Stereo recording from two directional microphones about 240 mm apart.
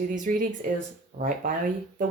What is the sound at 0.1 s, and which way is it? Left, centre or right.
Speech, right.